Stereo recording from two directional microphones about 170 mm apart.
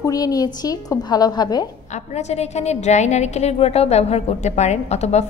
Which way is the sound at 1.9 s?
40° left (ahead or behind).